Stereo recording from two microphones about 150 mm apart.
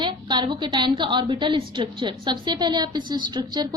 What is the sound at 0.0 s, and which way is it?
A woman's voice, 30° right (ahead or behind).